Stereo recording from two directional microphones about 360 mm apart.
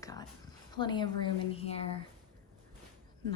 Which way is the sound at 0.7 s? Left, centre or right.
Centre.